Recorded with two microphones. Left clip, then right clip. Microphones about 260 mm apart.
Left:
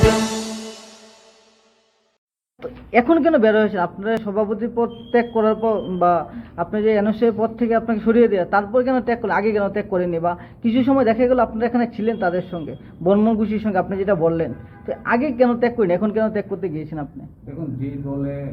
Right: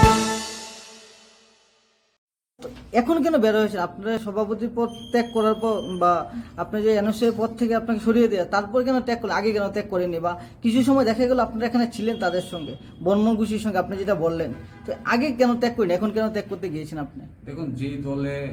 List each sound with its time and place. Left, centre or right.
0.1 s music: centre
2.6 s speech: centre
17.7 s speech: right